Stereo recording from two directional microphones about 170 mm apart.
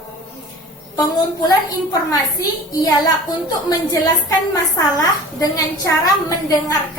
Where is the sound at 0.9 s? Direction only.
20° left (ahead or behind).